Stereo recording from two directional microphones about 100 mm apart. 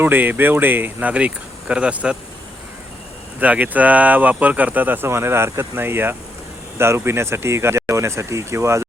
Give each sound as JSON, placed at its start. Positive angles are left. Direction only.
{"t": 0.0, "sound": "speech", "side_deg": -20}
{"t": 3.4, "sound": "speech", "side_deg": -15}